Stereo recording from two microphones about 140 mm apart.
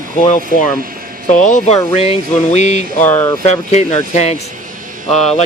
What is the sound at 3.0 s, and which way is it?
Speech, 15° left (ahead or behind).